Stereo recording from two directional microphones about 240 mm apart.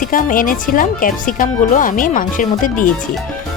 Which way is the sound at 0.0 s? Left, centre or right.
Left.